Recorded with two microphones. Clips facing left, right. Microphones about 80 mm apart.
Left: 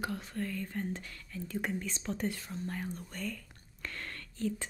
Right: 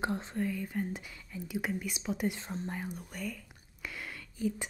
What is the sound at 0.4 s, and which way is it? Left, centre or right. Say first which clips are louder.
Speech: right 2 dB; centre.